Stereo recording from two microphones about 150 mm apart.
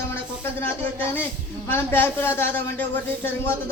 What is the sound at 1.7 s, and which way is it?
Speech, 15° left (ahead or behind).